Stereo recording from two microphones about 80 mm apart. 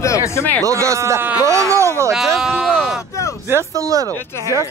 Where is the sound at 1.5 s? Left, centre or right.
Right.